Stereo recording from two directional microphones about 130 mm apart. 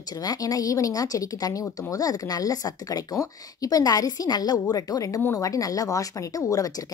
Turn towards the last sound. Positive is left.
turn(degrees=25)  # may be behind; listen again after turning